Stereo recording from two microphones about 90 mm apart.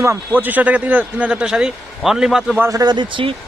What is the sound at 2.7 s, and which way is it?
Speech, 50° right (ahead or behind).